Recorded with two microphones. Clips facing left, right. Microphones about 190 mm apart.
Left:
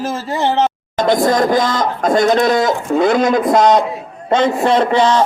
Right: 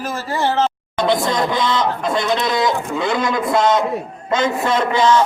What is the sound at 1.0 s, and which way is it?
A man's voice, 45° left (ahead or behind).